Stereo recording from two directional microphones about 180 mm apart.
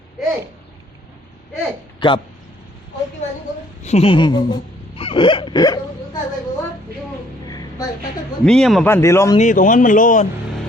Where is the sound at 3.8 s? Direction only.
35° left (ahead or behind).